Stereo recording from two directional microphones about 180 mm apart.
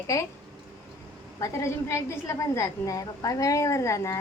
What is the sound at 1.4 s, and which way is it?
A woman's voice, 15° left (ahead or behind).